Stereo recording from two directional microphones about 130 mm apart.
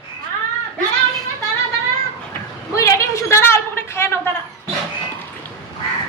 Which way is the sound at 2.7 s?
25° left (ahead or behind).